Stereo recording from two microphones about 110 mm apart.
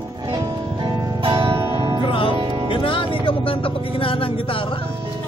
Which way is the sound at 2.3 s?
45° right (ahead or behind).